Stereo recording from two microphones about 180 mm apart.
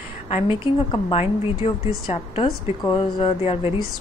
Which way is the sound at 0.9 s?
30° left (ahead or behind).